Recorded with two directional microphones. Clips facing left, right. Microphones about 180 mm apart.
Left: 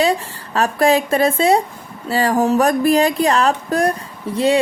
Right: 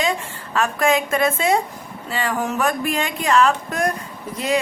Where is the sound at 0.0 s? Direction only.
35° left (ahead or behind).